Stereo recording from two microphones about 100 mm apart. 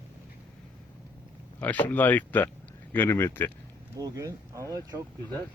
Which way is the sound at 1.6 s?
15° left (ahead or behind).